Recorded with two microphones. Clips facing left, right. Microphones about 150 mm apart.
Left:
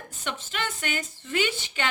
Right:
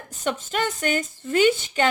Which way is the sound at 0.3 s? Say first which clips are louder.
Right 7 dB; 45° right (ahead or behind).